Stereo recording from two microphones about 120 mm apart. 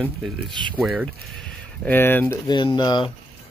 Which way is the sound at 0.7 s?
10° right (ahead or behind).